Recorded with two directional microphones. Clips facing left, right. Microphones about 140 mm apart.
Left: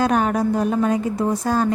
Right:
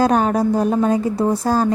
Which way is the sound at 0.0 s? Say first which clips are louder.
Right 3 dB; 35° right (ahead or behind).